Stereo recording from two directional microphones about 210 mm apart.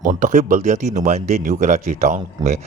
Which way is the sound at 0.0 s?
40° right (ahead or behind).